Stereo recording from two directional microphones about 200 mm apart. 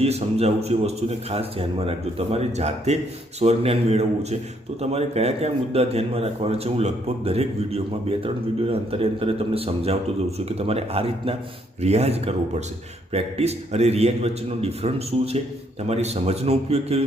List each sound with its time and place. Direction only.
0.0 s a man's voice: 30° right (ahead or behind)